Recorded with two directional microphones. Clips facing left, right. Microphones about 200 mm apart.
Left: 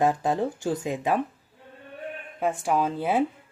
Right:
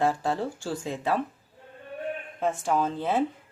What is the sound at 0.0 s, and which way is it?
Speech, 20° left (ahead or behind).